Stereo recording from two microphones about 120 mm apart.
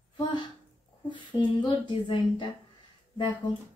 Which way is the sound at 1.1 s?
40° left (ahead or behind).